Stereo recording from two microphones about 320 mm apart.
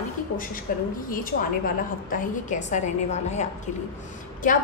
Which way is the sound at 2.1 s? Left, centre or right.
Left.